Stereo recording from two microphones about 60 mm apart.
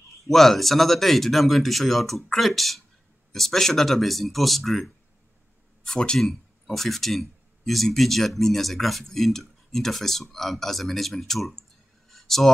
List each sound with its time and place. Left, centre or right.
0.3 s speech: centre
5.9 s speech: centre
6.1 s speech: centre
12.1 s a sound: centre